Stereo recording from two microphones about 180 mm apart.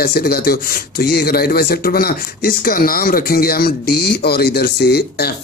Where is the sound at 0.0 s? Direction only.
60° left (ahead or behind).